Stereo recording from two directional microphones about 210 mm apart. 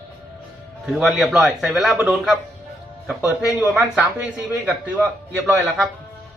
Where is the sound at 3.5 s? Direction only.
5° right (ahead or behind).